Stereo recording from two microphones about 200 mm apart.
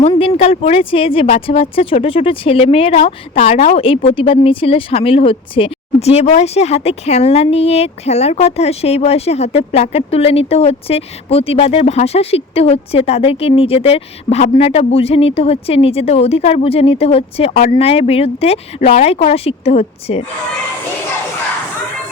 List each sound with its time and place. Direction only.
0.1 s speech: 30° left (ahead or behind)